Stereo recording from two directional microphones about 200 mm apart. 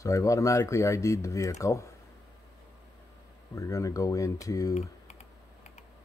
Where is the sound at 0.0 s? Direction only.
15° left (ahead or behind).